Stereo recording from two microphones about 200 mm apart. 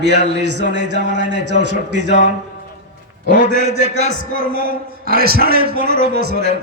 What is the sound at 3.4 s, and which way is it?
A man's voice, 55° right (ahead or behind).